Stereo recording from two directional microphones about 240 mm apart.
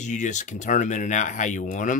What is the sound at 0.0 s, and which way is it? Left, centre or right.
Speech, left.